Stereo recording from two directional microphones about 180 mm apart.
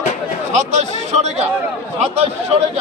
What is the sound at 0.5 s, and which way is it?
Speech, 40° right (ahead or behind).